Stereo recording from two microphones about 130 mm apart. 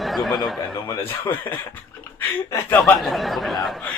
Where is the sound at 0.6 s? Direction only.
35° left (ahead or behind).